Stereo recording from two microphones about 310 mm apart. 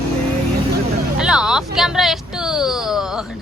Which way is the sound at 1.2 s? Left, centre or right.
Centre.